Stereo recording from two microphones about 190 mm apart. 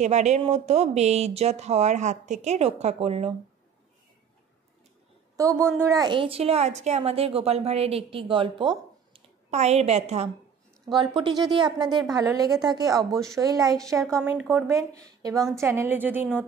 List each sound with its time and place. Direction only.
0.0 s a woman's voice: 40° right (ahead or behind)
5.3 s a woman's voice: 15° right (ahead or behind)
14.0 s a woman's voice: 5° left (ahead or behind)